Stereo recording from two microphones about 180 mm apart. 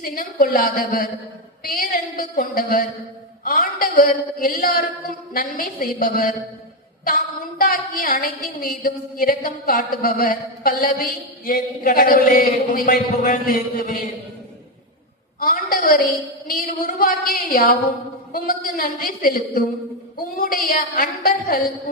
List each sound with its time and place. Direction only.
0.0 s a woman's voice: 55° left (ahead or behind)
7.6 s a woman's voice: 55° left (ahead or behind)
15.4 s a woman's voice: 50° left (ahead or behind)